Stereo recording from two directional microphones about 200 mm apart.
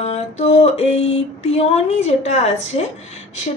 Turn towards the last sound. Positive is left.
turn(degrees=35)  # may be behind; listen again after turning